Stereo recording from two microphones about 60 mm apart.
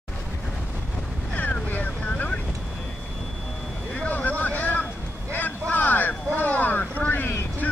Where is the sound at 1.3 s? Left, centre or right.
Left.